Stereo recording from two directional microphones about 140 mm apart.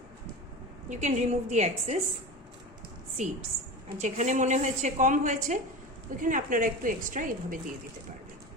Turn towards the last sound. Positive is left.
turn(degrees=-75)  # may be behind; listen again after turning